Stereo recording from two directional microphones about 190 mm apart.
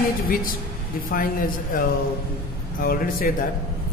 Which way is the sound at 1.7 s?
45° left (ahead or behind).